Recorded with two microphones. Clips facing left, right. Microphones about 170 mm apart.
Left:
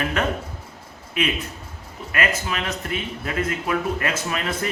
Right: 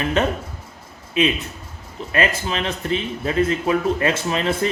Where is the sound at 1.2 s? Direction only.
20° right (ahead or behind).